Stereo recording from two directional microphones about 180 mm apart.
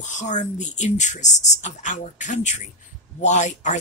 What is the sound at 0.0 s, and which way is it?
Speech, 40° left (ahead or behind).